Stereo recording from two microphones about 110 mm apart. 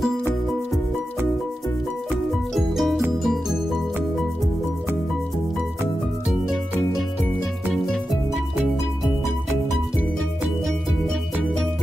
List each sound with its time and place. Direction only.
2.5 s music: centre (ahead or behind)